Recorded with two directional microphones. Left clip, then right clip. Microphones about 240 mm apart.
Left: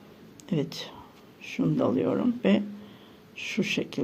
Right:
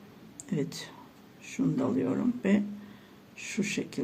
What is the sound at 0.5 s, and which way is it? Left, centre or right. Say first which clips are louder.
Speech: left 3 dB; left.